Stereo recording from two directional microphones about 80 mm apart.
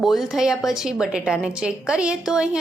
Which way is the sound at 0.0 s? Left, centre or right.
Centre.